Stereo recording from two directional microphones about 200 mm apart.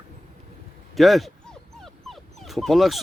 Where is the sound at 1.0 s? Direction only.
Centre (ahead or behind).